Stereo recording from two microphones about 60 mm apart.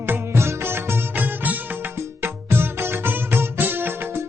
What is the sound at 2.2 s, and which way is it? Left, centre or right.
Music, right.